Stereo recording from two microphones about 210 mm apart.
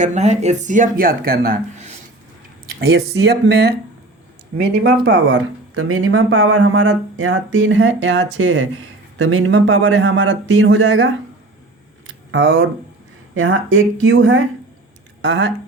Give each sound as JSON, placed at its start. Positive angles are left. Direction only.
{"t": 0.0, "sound": "speech", "side_deg": -35}
{"t": 2.6, "sound": "speech", "side_deg": -50}
{"t": 12.3, "sound": "speech", "side_deg": -65}
{"t": 13.3, "sound": "speech", "side_deg": -75}